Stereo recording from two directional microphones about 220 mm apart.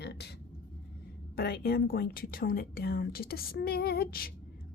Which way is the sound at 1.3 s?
45° left (ahead or behind).